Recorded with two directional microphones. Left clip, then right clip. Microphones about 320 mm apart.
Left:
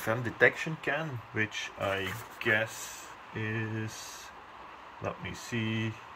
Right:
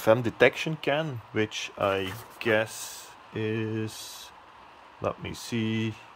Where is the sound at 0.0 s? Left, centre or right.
Right.